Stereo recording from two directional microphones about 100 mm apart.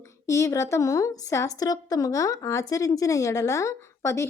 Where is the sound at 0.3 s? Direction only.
30° left (ahead or behind).